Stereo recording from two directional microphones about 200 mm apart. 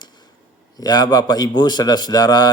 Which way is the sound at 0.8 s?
20° left (ahead or behind).